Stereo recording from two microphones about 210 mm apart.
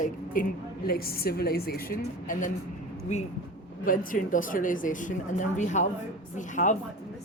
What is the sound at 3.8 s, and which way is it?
Speech, 40° left (ahead or behind).